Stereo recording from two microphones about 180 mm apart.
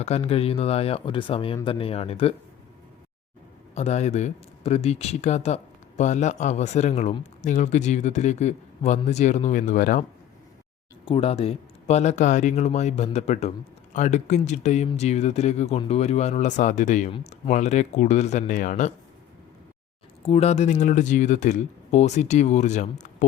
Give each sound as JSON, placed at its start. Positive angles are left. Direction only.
{"t": 0.0, "sound": "a man's voice", "side_deg": 35}
{"t": 3.8, "sound": "a man's voice", "side_deg": 40}
{"t": 11.0, "sound": "a man's voice", "side_deg": 30}
{"t": 17.1, "sound": "speech", "side_deg": 30}
{"t": 17.5, "sound": "a man's voice", "side_deg": 40}
{"t": 20.2, "sound": "a man's voice", "side_deg": 35}